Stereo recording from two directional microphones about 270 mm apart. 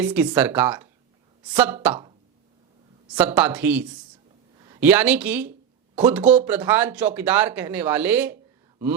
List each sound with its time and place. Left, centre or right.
0.0 s speech: centre
1.9 s speech: centre
3.2 s speech: centre